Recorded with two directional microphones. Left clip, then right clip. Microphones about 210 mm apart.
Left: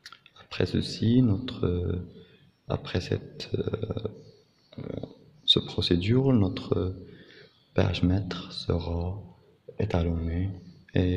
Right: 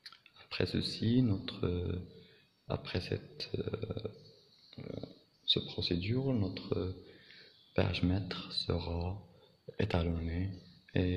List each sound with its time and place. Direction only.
0.0 s a man's voice: 5° left (ahead or behind)
4.8 s a sound: 5° left (ahead or behind)
5.4 s a man's voice: 15° left (ahead or behind)